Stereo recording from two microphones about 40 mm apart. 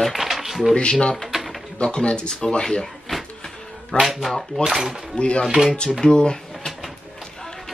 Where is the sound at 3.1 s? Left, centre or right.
Centre.